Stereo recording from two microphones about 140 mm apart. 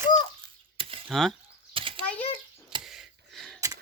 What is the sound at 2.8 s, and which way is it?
Gasp, centre (ahead or behind).